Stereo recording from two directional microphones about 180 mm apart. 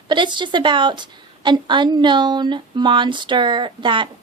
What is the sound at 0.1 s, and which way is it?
Speech, 25° right (ahead or behind).